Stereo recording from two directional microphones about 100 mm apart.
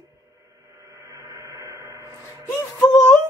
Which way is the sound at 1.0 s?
35° right (ahead or behind).